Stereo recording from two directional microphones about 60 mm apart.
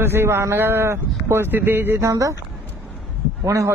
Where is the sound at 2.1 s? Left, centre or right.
Right.